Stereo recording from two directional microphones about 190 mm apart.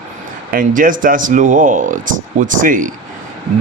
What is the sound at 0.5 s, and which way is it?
Speech, 45° right (ahead or behind).